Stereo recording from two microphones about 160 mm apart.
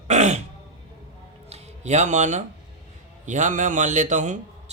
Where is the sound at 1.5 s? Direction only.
45° right (ahead or behind).